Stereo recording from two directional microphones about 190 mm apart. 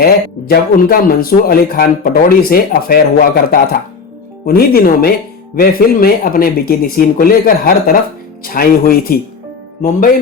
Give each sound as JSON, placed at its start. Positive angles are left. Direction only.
{"t": 0.0, "sound": "speech", "side_deg": 55}